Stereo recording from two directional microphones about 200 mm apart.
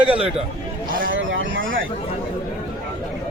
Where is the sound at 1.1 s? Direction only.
70° right (ahead or behind).